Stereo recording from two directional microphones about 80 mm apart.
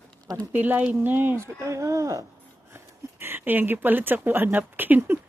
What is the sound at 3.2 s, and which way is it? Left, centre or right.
Speech, right.